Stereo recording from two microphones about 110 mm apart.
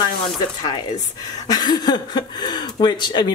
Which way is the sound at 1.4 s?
40° left (ahead or behind).